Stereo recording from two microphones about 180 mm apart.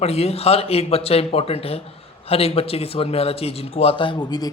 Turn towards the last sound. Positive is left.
turn(degrees=20)  # may be behind; listen again after turning